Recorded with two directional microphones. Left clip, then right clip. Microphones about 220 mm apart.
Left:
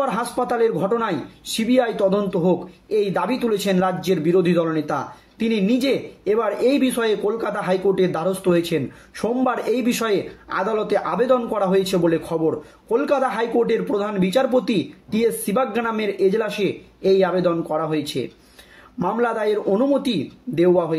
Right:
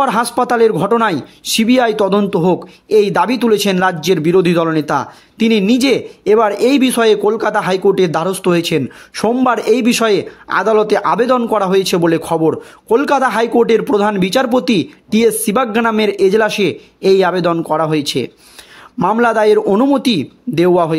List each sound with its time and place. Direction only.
0.0 s speech: 45° right (ahead or behind)